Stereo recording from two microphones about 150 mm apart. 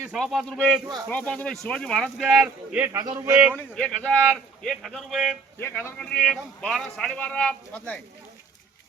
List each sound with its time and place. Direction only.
0.1 s speech: centre (ahead or behind)
3.0 s speech: 20° right (ahead or behind)
3.6 s speech: 5° left (ahead or behind)
5.5 s speech: 15° left (ahead or behind)